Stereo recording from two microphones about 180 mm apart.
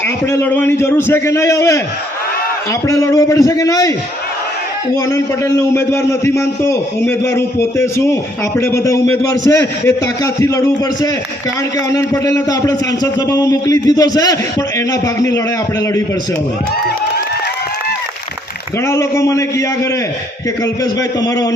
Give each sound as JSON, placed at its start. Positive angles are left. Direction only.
{"t": 0.3, "sound": "a man's voice", "side_deg": 10}
{"t": 2.8, "sound": "a man's voice", "side_deg": 15}
{"t": 5.7, "sound": "a man's voice", "side_deg": 15}
{"t": 11.9, "sound": "a man's voice", "side_deg": 20}
{"t": 18.9, "sound": "a man's voice", "side_deg": 15}
{"t": 21.2, "sound": "a man's voice", "side_deg": 20}